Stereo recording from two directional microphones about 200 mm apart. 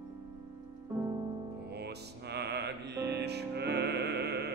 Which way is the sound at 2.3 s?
55° right (ahead or behind).